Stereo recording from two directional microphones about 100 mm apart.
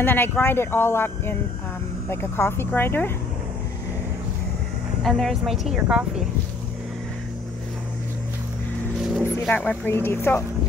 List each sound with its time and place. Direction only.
0.0 s speech: 20° left (ahead or behind)
5.0 s speech: centre (ahead or behind)
9.5 s speech: 15° left (ahead or behind)